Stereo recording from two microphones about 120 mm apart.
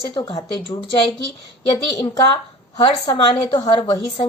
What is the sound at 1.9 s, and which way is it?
Speech, 30° left (ahead or behind).